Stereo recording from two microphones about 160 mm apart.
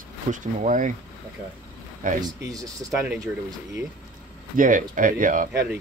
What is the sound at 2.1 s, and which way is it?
Speech, 25° right (ahead or behind).